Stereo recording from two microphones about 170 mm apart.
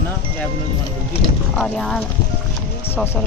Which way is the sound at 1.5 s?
5° left (ahead or behind).